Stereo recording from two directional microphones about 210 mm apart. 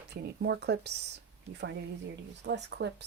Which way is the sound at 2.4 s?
55° right (ahead or behind).